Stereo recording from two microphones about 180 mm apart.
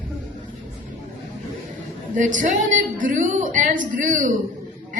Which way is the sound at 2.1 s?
45° right (ahead or behind).